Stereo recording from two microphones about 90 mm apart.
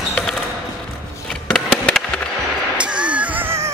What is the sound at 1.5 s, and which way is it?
Music, 10° left (ahead or behind).